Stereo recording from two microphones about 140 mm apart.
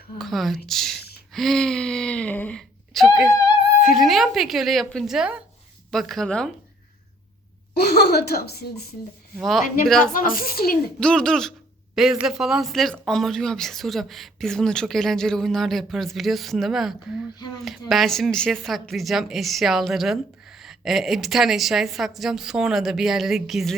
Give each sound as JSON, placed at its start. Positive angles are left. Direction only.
{"t": 0.2, "sound": "speech", "side_deg": 0}
{"t": 9.4, "sound": "speech", "side_deg": 0}
{"t": 10.0, "sound": "a woman's voice", "side_deg": 90}
{"t": 11.0, "sound": "speech", "side_deg": 5}